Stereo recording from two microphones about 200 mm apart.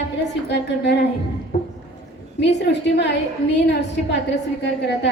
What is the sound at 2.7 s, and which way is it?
Speech, 60° left (ahead or behind).